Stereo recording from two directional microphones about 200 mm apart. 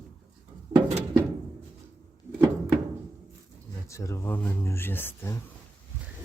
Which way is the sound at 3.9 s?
15° left (ahead or behind).